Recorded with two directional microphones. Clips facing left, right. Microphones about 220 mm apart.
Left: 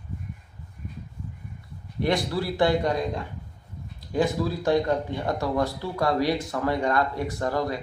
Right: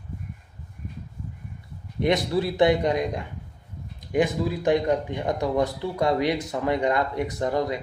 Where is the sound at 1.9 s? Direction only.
20° right (ahead or behind).